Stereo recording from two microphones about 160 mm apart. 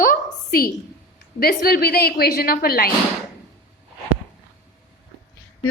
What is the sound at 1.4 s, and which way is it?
Speech, 70° left (ahead or behind).